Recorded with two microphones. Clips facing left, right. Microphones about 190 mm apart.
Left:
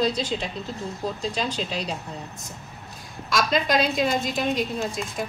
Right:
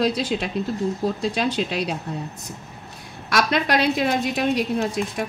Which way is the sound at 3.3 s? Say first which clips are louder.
Right 2 dB; 65° right (ahead or behind).